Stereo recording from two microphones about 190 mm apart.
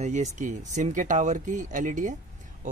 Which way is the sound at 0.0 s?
40° right (ahead or behind).